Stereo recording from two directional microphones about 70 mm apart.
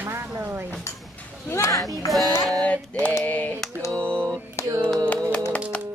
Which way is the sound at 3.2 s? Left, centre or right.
Left.